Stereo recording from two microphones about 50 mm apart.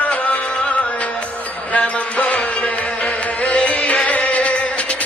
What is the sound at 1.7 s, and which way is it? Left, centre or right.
Music, left.